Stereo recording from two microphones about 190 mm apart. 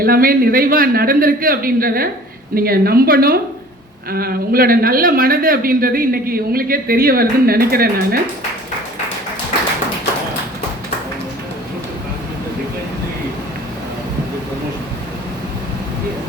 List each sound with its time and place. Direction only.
0.0 s speech: 50° right (ahead or behind)